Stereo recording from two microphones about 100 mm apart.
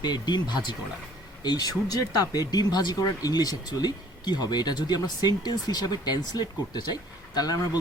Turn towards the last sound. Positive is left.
turn(degrees=40)  # may be behind; listen again after turning